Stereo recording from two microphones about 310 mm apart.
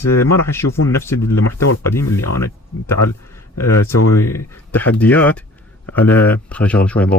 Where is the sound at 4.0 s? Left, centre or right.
Left.